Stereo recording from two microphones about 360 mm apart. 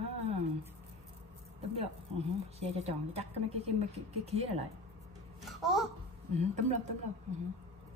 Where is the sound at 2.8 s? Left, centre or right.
Centre.